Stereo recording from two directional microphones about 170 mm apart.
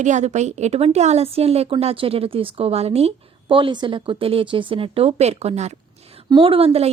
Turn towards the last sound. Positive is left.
turn(degrees=-35)  # may be behind; listen again after turning